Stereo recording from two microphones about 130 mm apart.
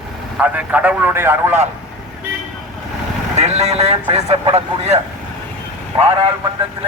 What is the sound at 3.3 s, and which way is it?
Speech, 55° right (ahead or behind).